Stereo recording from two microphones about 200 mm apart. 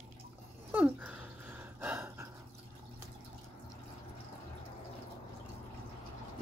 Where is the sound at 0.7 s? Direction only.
10° right (ahead or behind).